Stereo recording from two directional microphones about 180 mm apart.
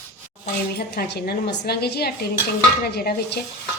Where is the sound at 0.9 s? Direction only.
60° left (ahead or behind).